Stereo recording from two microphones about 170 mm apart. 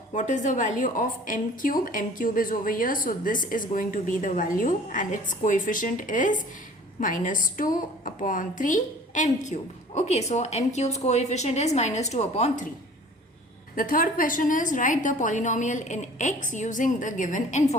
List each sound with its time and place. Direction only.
0.1 s a woman's voice: 45° left (ahead or behind)
13.7 s a woman's voice: 55° left (ahead or behind)